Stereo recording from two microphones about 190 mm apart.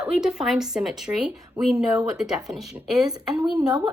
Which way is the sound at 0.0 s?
5° right (ahead or behind).